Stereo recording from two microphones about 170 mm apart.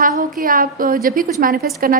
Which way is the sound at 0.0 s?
55° right (ahead or behind).